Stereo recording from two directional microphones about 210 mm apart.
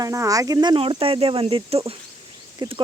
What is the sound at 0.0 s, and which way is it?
Speech, 15° right (ahead or behind).